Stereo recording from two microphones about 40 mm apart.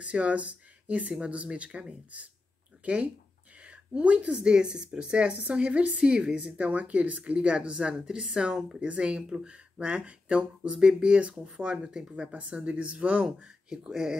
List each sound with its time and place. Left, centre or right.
0.0 s speech: right
1.2 s speech: right
12.2 s speech: right; by 14.1 s centre